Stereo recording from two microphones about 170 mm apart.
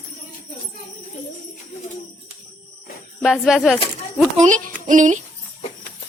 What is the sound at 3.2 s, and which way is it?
Speech, centre (ahead or behind).